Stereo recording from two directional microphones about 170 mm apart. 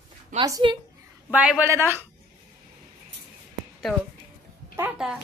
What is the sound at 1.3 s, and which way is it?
Speech, 5° right (ahead or behind).